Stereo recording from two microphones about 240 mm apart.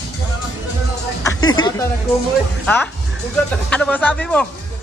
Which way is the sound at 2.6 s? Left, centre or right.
Centre.